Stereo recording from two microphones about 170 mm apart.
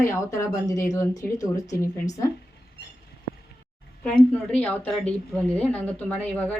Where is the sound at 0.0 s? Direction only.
15° left (ahead or behind).